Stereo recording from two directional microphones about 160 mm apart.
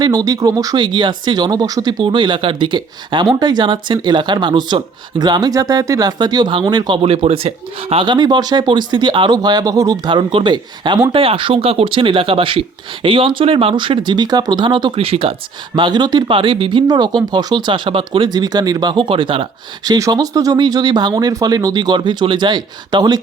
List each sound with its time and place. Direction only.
0.0 s speech: 25° right (ahead or behind)